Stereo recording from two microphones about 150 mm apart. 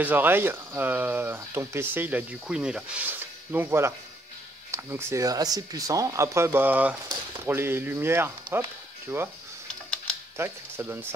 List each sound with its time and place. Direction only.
0.0 s speech: 15° right (ahead or behind)
9.7 s typing: 5° left (ahead or behind)
10.3 s speech: 15° right (ahead or behind)